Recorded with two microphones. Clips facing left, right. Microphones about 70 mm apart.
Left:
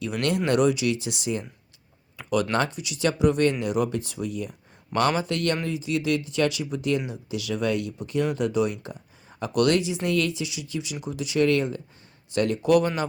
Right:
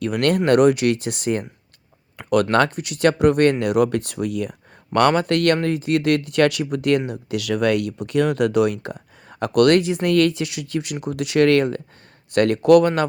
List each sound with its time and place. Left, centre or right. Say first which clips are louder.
0.0 s speech: right 6 dB; right
4.9 s speech: right 7 dB; right